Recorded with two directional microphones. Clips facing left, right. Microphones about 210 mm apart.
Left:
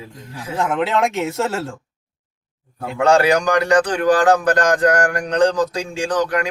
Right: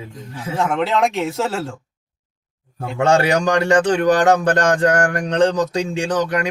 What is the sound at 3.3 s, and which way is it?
Speech, 25° right (ahead or behind).